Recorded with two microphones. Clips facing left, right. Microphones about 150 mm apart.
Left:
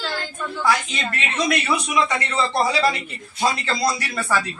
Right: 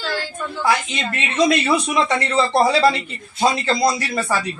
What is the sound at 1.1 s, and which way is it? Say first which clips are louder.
A man's voice: right 6 dB; 20° right (ahead or behind).